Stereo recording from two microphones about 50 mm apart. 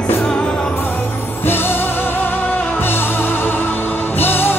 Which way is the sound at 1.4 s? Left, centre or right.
Left.